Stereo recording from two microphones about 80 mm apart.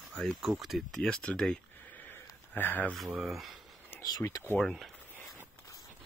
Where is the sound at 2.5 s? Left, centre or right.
Left.